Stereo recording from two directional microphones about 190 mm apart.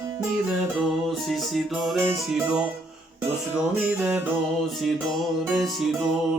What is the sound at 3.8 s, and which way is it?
Music, 5° right (ahead or behind).